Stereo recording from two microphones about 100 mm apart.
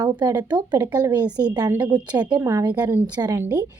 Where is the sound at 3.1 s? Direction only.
45° right (ahead or behind).